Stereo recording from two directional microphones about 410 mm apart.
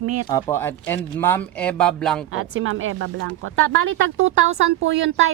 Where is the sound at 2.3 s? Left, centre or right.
Right.